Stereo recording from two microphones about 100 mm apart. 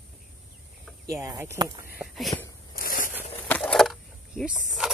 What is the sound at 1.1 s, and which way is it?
Speech, 30° right (ahead or behind).